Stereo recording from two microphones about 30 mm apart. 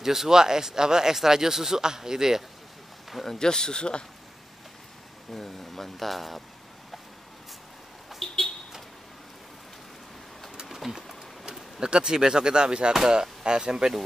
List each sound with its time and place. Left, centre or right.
0.0 s speech: centre
3.3 s speech: left
5.3 s speech: centre
8.2 s a sound: centre
10.7 s pigeon: centre
11.8 s speech: right
12.9 s speech: centre